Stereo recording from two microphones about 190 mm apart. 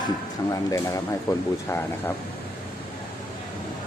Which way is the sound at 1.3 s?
20° left (ahead or behind).